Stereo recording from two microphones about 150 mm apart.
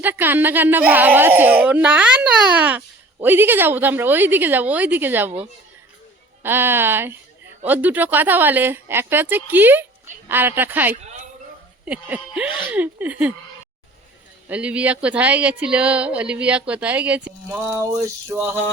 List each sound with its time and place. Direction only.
0.0 s speech: 15° right (ahead or behind)
6.4 s speech: 15° right (ahead or behind)
14.4 s speech: 10° right (ahead or behind)
17.7 s speech: 20° right (ahead or behind)